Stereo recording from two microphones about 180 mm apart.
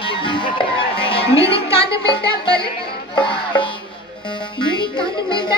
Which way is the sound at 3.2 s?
30° left (ahead or behind).